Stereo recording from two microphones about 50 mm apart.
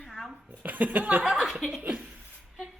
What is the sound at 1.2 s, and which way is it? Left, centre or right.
Speech, centre.